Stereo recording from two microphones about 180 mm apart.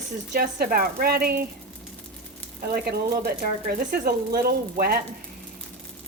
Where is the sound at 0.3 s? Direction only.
55° right (ahead or behind).